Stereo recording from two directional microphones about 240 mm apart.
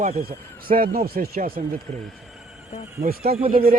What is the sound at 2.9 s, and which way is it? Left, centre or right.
Speech, right.